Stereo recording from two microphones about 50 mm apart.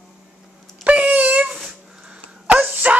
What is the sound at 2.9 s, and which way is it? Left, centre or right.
Music, right.